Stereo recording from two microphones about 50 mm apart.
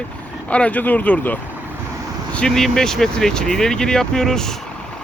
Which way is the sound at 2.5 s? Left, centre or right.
Centre.